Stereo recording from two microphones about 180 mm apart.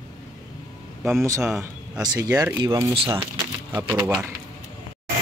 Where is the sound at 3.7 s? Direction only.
10° right (ahead or behind).